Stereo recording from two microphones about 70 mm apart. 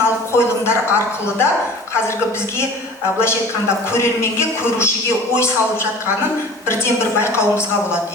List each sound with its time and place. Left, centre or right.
0.0 s a sound: left
3.9 s speech: left
7.2 s speech: left